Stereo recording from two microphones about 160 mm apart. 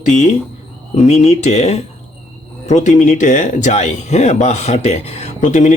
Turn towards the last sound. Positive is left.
turn(degrees=50)  # may be behind; listen again after turning